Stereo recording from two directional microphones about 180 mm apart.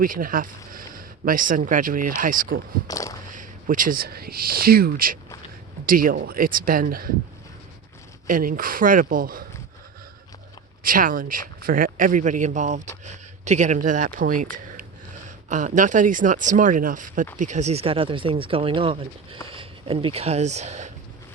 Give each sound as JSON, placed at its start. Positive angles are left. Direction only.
{"t": 0.0, "sound": "speech", "side_deg": -50}
{"t": 2.8, "sound": "a sound", "side_deg": 20}
{"t": 3.3, "sound": "speech", "side_deg": -50}
{"t": 8.3, "sound": "speech", "side_deg": -50}
{"t": 10.8, "sound": "speech", "side_deg": -50}